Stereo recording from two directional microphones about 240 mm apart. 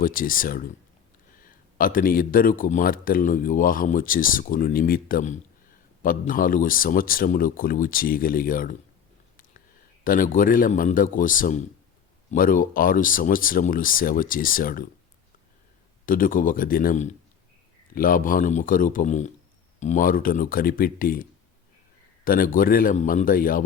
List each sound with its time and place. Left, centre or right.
0.0 s speech: left
10.0 s speech: left
16.0 s speech: left